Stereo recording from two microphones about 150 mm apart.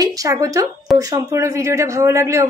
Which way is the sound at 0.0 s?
25° right (ahead or behind).